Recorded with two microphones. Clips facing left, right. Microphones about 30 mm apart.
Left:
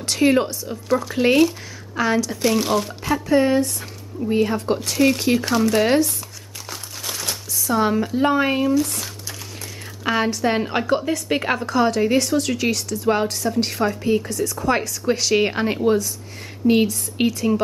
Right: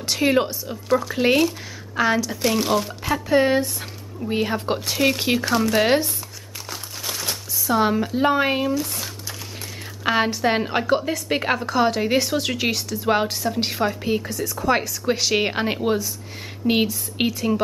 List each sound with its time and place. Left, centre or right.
0.0 s speech: centre
6.7 s crumpling: centre
10.0 s speech: centre